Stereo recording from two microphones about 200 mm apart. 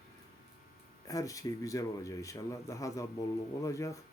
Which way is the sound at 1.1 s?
15° left (ahead or behind).